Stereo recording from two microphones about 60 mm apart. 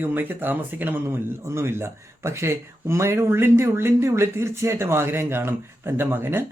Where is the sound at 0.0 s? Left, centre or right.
Right.